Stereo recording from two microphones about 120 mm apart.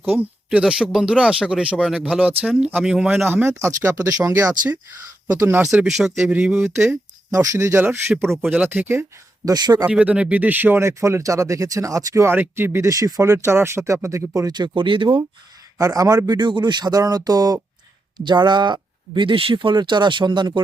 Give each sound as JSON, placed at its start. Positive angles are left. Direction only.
{"t": 0.0, "sound": "speech", "side_deg": -15}
{"t": 3.2, "sound": "speech", "side_deg": -20}
{"t": 5.7, "sound": "speech", "side_deg": -5}
{"t": 6.7, "sound": "speech", "side_deg": -25}
{"t": 9.8, "sound": "speech", "side_deg": -10}
{"t": 14.8, "sound": "speech", "side_deg": -45}
{"t": 15.8, "sound": "speech", "side_deg": -30}